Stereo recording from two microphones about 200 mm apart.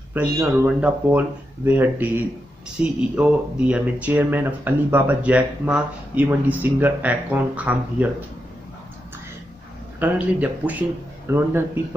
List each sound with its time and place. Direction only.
0.1 s speech: 10° right (ahead or behind)
9.9 s speech: 10° right (ahead or behind)